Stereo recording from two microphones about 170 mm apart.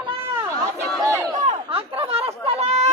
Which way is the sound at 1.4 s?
35° right (ahead or behind).